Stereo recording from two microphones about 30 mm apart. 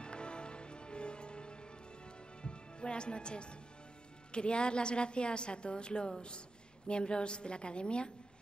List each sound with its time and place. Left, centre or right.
0.0 s music: left
2.4 s a woman's voice: left